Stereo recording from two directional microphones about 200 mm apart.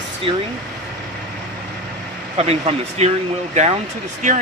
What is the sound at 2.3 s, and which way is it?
Speech, 30° right (ahead or behind).